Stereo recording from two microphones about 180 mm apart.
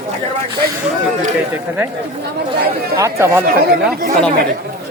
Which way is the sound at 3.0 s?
15° right (ahead or behind).